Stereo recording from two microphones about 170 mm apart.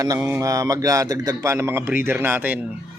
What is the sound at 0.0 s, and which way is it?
Speech, 15° right (ahead or behind).